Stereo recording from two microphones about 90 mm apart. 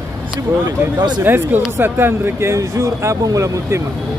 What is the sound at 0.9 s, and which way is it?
Speech, 55° right (ahead or behind).